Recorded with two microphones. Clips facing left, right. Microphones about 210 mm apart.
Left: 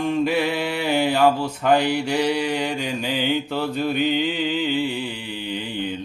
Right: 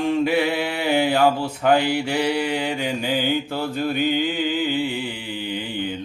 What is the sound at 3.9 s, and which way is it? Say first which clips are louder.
Mantra: right 1 dB; 50° right (ahead or behind).